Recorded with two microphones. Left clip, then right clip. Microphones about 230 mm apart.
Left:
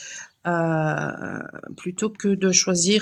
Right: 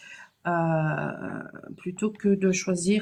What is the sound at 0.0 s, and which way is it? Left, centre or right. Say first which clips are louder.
Speech: left 4 dB; left.